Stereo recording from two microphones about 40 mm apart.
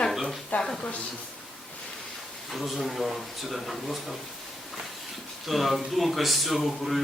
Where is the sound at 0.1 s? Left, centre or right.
Centre.